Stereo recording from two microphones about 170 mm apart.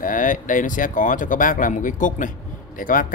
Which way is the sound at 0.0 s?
50° left (ahead or behind).